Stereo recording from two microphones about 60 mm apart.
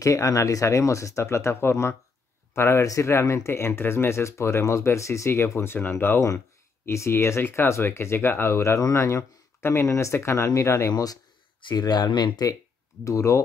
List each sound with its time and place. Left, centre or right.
0.0 s speech: left
6.9 s speech: left
10.9 s speech: left
13.0 s speech: left